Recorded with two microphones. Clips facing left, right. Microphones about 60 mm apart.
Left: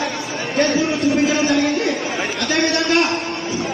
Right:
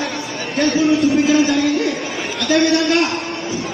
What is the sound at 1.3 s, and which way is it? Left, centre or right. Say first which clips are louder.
Speech: right 2 dB; left.